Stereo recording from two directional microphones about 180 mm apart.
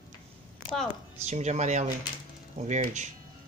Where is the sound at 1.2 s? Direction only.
40° right (ahead or behind).